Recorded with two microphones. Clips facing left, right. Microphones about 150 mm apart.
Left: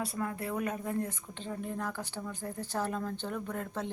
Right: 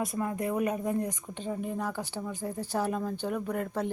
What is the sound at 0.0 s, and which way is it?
A woman's voice, 15° right (ahead or behind).